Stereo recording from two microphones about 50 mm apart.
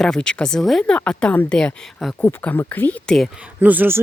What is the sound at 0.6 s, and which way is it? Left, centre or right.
Speech, centre.